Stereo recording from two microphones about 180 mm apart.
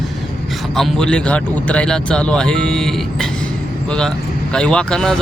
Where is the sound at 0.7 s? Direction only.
Centre (ahead or behind).